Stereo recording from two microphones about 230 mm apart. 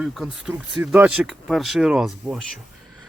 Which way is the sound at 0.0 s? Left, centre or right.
Centre.